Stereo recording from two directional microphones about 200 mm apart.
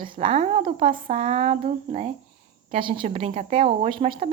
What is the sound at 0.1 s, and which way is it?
A woman's voice, 30° right (ahead or behind).